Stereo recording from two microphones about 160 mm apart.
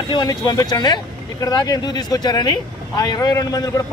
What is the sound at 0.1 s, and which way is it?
Speech, 25° left (ahead or behind).